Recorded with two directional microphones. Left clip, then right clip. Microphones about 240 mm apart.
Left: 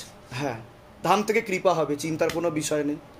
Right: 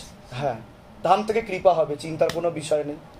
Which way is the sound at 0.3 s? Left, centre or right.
Left.